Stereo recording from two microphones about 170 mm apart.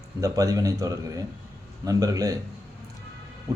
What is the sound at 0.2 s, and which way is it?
Speech, 20° right (ahead or behind).